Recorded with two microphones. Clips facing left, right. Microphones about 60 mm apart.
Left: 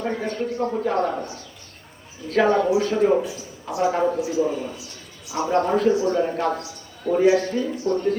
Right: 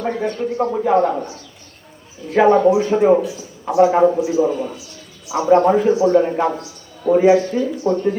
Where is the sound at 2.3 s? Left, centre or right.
Centre.